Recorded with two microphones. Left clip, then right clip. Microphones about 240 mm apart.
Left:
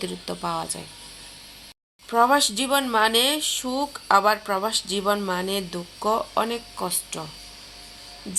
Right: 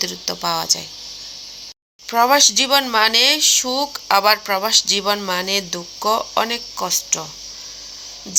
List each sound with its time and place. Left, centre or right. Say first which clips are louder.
0.0 s speech: right 7 dB; centre
2.0 s speech: right 5 dB; centre